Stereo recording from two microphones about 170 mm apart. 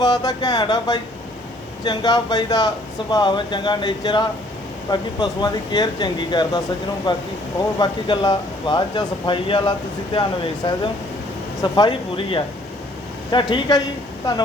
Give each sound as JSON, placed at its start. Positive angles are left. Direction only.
{"t": 0.0, "sound": "speech", "side_deg": 25}